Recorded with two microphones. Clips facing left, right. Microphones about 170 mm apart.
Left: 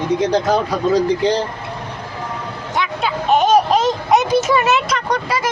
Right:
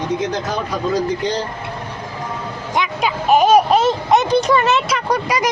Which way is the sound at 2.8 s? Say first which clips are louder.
Right 1 dB; 10° right (ahead or behind).